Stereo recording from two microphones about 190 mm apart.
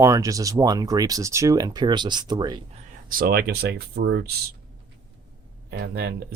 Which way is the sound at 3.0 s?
50° right (ahead or behind).